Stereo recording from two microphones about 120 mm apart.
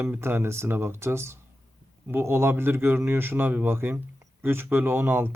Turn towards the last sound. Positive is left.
turn(degrees=-20)  # may be behind; listen again after turning